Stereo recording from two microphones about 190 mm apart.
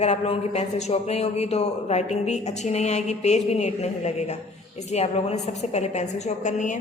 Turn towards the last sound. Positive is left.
turn(degrees=40)  # may be behind; listen again after turning